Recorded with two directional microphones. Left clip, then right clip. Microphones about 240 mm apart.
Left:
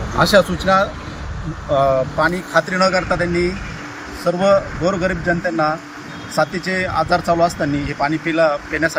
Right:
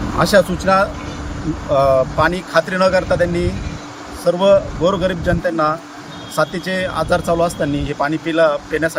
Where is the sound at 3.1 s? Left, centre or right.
Centre.